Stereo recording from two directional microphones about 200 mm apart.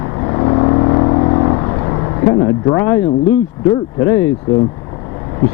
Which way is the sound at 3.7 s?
15° left (ahead or behind).